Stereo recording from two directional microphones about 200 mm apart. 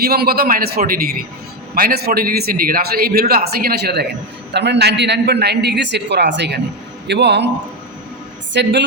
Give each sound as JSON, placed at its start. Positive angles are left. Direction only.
{"t": 0.0, "sound": "a man's voice", "side_deg": -50}
{"t": 8.5, "sound": "a man's voice", "side_deg": -60}